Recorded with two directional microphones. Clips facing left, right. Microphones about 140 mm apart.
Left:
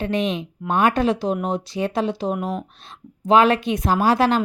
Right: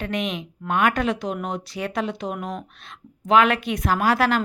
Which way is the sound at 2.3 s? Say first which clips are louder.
Left 5 dB; 5° left (ahead or behind).